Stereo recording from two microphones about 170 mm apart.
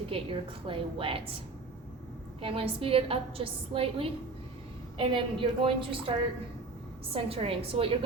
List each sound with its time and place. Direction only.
0.1 s a woman's voice: 30° right (ahead or behind)
2.4 s a woman's voice: 35° right (ahead or behind)